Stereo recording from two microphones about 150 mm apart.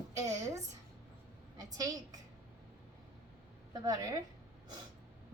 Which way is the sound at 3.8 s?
25° right (ahead or behind).